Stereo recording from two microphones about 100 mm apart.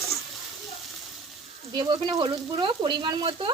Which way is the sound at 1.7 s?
55° right (ahead or behind).